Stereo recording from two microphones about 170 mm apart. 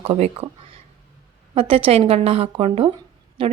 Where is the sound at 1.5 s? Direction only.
35° right (ahead or behind).